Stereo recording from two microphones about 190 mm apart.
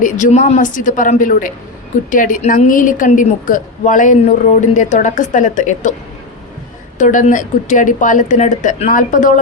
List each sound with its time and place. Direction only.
0.0 s a woman's voice: 40° left (ahead or behind)
7.0 s a woman's voice: 40° left (ahead or behind)